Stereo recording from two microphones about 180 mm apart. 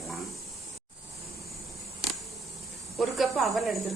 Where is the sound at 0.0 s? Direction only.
Centre (ahead or behind).